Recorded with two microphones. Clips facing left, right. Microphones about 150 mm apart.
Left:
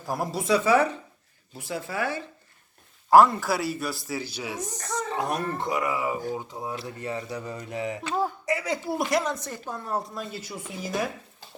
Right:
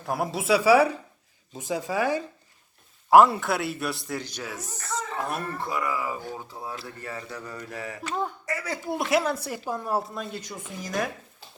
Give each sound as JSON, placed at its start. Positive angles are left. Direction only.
{"t": 0.0, "sound": "speech", "side_deg": 0}
{"t": 8.9, "sound": "speech", "side_deg": 0}